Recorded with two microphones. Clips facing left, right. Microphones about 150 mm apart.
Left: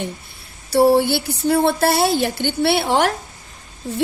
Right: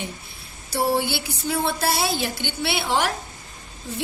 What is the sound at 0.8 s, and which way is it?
A woman's voice, 45° left (ahead or behind).